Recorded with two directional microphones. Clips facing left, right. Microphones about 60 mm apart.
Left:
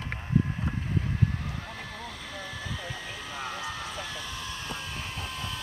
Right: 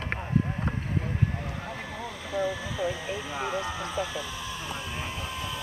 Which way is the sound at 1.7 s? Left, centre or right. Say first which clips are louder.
Right 3 dB; centre.